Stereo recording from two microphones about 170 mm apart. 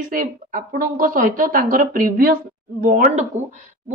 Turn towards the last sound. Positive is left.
turn(degrees=-50)  # may be behind; listen again after turning